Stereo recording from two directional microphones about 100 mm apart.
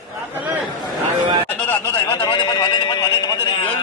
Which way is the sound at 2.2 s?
50° left (ahead or behind).